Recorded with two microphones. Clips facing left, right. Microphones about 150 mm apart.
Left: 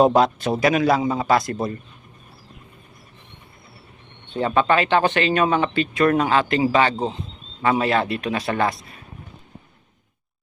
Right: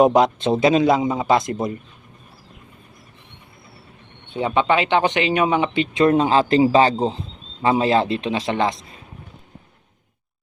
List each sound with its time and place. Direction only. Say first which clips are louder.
0.0 s a man's voice: right 1 dB; 20° right (ahead or behind)
4.4 s a man's voice: even; 15° right (ahead or behind)